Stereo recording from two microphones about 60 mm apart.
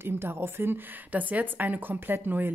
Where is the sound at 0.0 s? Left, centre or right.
Right.